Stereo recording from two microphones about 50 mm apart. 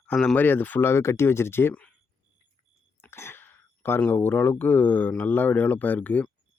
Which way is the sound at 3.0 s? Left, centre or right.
Left.